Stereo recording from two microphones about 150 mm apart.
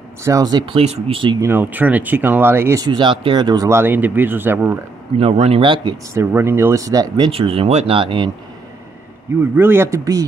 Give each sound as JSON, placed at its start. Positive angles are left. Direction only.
{"t": 0.2, "sound": "speech", "side_deg": -20}
{"t": 1.4, "sound": "speech", "side_deg": -15}
{"t": 5.2, "sound": "speech", "side_deg": -40}
{"t": 6.1, "sound": "speech", "side_deg": -15}
{"t": 7.2, "sound": "speech", "side_deg": -40}
{"t": 9.4, "sound": "speech", "side_deg": -15}